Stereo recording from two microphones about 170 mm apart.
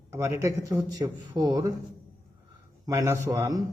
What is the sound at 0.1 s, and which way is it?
A man's voice, 15° right (ahead or behind).